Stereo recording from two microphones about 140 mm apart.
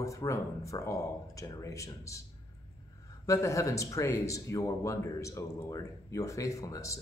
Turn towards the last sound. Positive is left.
turn(degrees=25)  # may be behind; listen again after turning